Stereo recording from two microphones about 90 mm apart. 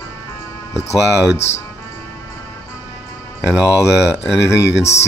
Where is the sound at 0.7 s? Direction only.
35° left (ahead or behind).